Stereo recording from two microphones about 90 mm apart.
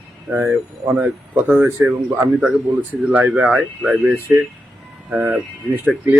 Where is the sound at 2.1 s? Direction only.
20° right (ahead or behind).